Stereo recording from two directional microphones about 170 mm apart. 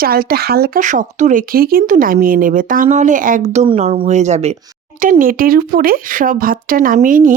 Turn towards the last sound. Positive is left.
turn(degrees=-50)  # may be behind; listen again after turning